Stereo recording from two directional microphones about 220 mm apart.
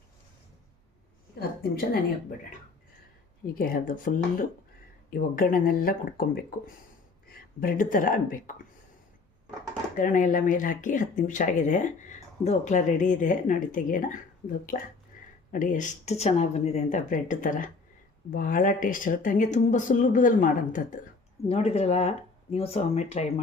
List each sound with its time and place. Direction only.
1.4 s a woman's voice: 45° left (ahead or behind)
3.5 s speech: 40° left (ahead or behind)
9.9 s speech: 35° left (ahead or behind)
15.2 s a sound: 35° left (ahead or behind)
15.5 s speech: 35° left (ahead or behind)